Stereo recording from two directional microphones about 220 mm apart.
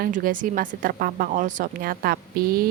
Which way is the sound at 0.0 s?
40° right (ahead or behind).